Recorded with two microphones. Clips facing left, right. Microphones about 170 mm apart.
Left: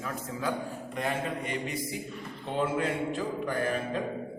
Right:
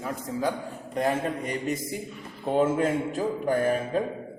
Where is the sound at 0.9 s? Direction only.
40° right (ahead or behind).